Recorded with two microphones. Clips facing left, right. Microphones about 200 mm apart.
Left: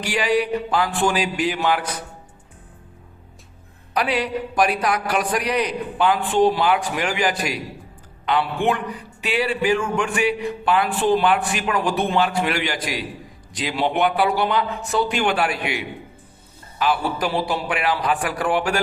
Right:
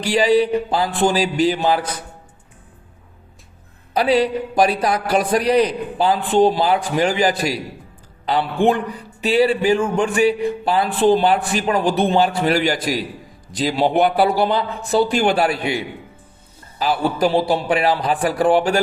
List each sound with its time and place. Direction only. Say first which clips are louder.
0.0 s a man's voice: right 5 dB; 30° right (ahead or behind)
3.9 s a man's voice: right 6 dB; 35° right (ahead or behind)